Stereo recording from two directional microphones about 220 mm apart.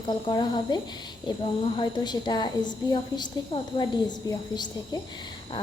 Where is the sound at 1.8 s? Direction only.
20° left (ahead or behind).